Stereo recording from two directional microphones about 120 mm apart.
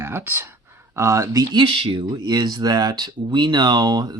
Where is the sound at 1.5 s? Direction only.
45° right (ahead or behind).